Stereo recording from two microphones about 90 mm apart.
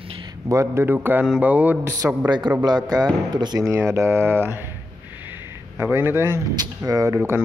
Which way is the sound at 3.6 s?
30° right (ahead or behind).